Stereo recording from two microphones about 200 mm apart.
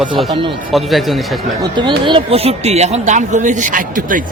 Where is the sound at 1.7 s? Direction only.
25° right (ahead or behind); by 4.2 s 40° right (ahead or behind).